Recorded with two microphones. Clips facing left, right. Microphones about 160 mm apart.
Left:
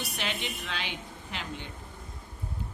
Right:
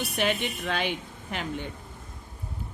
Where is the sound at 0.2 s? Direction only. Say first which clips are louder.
Right 10 dB; 50° right (ahead or behind).